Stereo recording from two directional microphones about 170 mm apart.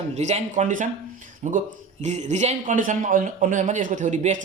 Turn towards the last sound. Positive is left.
turn(degrees=-45)  # may be behind; listen again after turning